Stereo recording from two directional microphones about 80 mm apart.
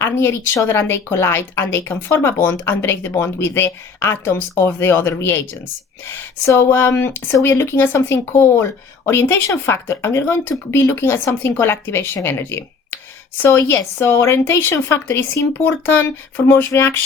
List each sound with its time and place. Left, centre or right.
0.0 s a woman's voice: left